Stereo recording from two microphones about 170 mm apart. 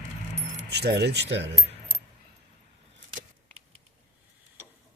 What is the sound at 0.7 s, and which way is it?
Speech, 75° right (ahead or behind).